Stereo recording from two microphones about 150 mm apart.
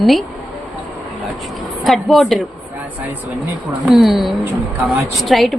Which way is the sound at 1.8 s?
Centre (ahead or behind).